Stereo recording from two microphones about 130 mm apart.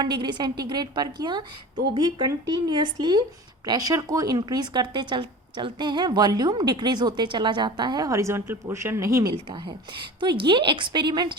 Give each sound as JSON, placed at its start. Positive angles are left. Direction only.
{"t": 0.0, "sound": "speech", "side_deg": -35}